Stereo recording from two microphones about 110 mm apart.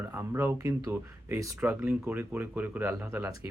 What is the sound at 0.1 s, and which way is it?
Speech, 20° right (ahead or behind).